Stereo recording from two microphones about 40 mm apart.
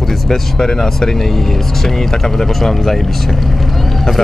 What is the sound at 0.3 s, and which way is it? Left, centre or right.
Speech, centre.